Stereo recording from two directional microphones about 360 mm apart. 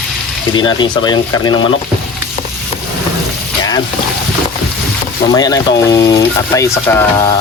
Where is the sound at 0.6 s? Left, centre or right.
Centre.